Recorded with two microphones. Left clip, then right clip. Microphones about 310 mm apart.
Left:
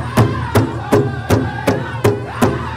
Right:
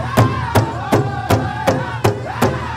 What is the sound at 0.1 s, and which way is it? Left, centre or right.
Music, centre.